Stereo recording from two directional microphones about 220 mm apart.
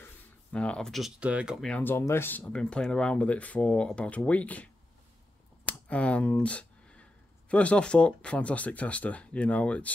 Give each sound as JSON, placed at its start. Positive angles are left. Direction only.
{"t": 0.0, "sound": "speech", "side_deg": 5}
{"t": 5.9, "sound": "speech", "side_deg": 5}